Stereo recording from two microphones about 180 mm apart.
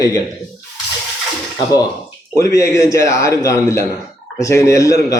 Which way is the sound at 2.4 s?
15° left (ahead or behind).